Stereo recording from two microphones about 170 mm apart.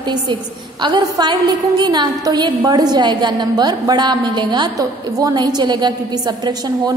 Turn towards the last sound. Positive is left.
turn(degrees=-25)  # may be behind; listen again after turning